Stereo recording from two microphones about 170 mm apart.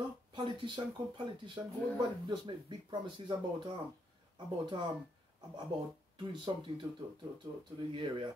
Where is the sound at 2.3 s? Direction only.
25° right (ahead or behind).